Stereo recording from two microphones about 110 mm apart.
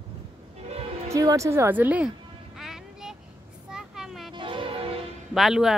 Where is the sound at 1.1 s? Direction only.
30° right (ahead or behind); by 2.1 s 15° right (ahead or behind).